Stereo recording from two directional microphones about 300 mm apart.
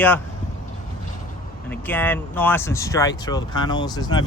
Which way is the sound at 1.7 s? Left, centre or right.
Centre.